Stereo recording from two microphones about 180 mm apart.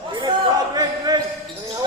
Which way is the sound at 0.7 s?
20° right (ahead or behind).